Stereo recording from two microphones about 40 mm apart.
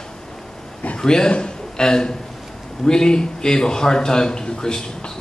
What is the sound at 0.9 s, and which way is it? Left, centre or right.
A man's voice, centre.